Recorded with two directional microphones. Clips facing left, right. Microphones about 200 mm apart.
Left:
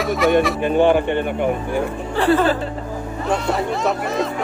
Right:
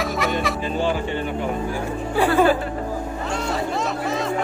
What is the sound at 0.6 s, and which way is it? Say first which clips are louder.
Speech: left 8 dB; 60° left (ahead or behind).